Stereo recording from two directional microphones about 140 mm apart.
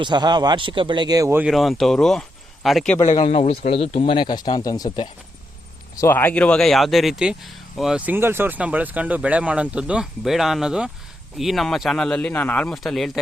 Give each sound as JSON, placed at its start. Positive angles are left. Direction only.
{"t": 0.0, "sound": "a man's voice", "side_deg": -30}
{"t": 1.4, "sound": "speech", "side_deg": 0}
{"t": 3.2, "sound": "speech", "side_deg": 45}
{"t": 6.0, "sound": "speech", "side_deg": 15}